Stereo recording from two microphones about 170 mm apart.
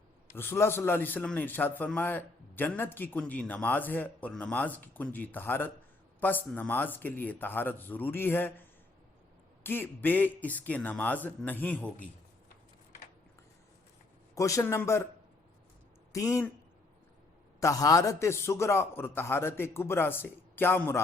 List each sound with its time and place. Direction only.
0.3 s a man's voice: 15° left (ahead or behind)
9.6 s a man's voice: 10° left (ahead or behind)
14.3 s a man's voice: 20° left (ahead or behind)
16.1 s speech: 20° left (ahead or behind)
17.6 s a man's voice: 20° left (ahead or behind)